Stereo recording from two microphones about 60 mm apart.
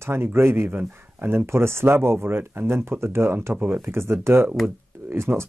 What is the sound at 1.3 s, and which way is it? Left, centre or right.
Speech, right.